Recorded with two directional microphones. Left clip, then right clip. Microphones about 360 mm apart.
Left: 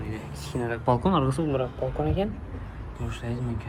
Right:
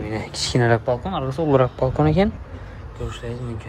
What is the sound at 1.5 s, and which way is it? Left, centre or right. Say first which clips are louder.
Speech: right 10 dB; right.